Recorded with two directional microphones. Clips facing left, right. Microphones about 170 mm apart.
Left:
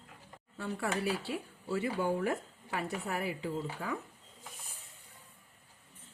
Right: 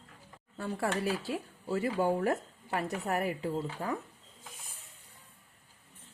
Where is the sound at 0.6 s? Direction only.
40° right (ahead or behind).